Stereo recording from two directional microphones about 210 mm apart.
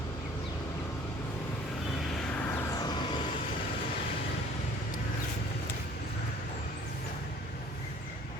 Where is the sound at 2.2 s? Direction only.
5° left (ahead or behind).